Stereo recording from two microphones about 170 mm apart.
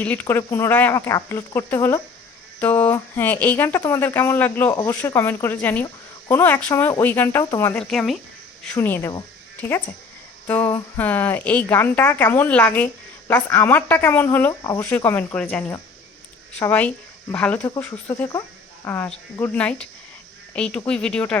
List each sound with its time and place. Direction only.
0.0 s speech: 10° left (ahead or behind)
4.7 s speech: 25° left (ahead or behind)
4.9 s speech: 15° left (ahead or behind)
10.4 s a sound: 10° left (ahead or behind)
10.9 s speech: 10° left (ahead or behind)